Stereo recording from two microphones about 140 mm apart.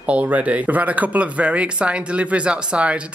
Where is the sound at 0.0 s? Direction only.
10° right (ahead or behind).